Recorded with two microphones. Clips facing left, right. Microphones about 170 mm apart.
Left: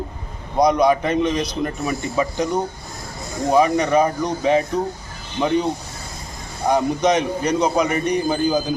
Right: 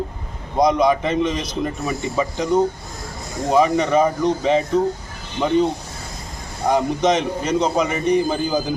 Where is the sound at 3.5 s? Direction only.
Centre (ahead or behind).